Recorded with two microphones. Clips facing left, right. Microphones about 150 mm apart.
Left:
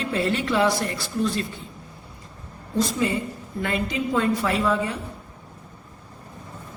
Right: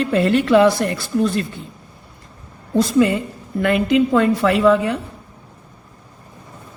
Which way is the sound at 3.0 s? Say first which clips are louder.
Right 9 dB; 65° right (ahead or behind).